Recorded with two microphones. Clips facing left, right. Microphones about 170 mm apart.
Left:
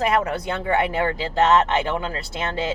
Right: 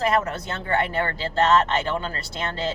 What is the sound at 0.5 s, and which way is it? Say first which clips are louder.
Speech: left 2 dB; 15° left (ahead or behind).